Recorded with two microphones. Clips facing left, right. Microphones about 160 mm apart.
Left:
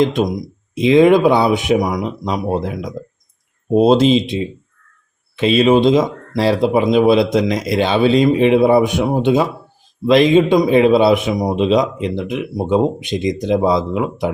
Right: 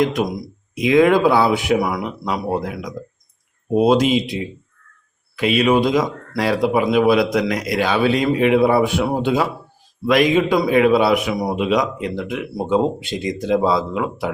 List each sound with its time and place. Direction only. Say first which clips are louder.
0.0 s a man's voice: left 3 dB; 25° left (ahead or behind)